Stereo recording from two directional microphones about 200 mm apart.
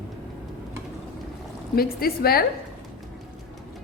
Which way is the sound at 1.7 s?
50° left (ahead or behind).